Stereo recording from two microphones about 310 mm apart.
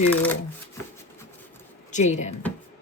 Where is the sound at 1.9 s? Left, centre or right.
Left.